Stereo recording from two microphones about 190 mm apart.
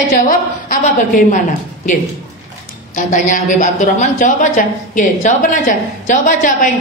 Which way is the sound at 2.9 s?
40° left (ahead or behind).